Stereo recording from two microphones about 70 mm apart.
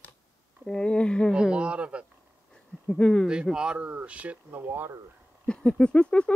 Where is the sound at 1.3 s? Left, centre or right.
Centre.